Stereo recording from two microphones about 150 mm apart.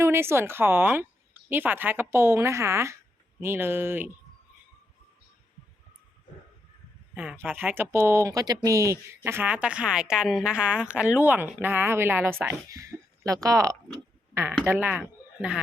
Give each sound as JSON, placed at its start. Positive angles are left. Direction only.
{"t": 0.0, "sound": "a woman's voice", "side_deg": -15}
{"t": 7.1, "sound": "speech", "side_deg": -10}
{"t": 14.6, "sound": "speech", "side_deg": -10}
{"t": 15.0, "sound": "bird", "side_deg": -5}